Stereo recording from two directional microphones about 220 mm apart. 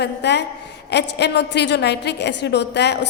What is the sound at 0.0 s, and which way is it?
A woman's voice, 50° left (ahead or behind).